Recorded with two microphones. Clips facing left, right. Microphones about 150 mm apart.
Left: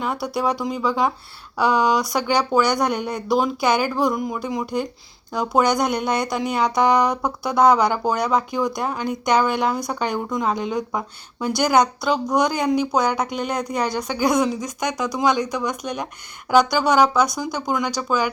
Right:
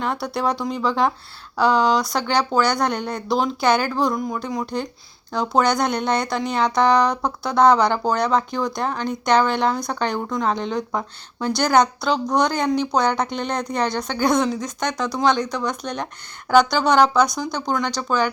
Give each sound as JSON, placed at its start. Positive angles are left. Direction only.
{"t": 0.0, "sound": "speech", "side_deg": 5}